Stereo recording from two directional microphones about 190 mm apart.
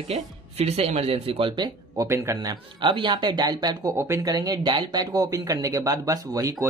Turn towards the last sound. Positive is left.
turn(degrees=-20)  # may be behind; listen again after turning